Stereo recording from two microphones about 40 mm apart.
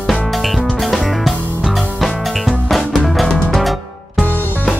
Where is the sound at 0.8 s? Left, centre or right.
Centre.